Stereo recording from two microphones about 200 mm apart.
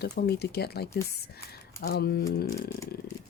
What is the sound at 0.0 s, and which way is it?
Speech, 55° left (ahead or behind).